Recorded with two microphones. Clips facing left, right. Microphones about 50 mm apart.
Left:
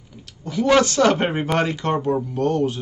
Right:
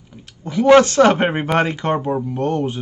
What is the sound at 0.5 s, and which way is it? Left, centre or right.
A man's voice, right.